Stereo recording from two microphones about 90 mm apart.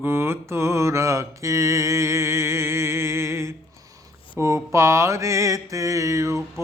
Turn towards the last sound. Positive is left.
turn(degrees=-35)  # may be behind; listen again after turning